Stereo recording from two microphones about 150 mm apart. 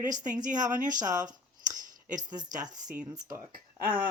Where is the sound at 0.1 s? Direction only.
25° right (ahead or behind).